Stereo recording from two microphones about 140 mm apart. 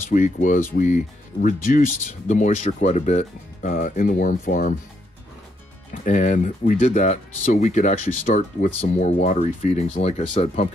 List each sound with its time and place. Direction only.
0.1 s speech: 65° left (ahead or behind)
3.7 s speech: 75° left (ahead or behind)
6.0 s speech: 60° left (ahead or behind)